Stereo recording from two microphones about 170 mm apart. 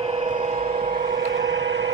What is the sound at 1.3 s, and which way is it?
Vehicle, 90° right.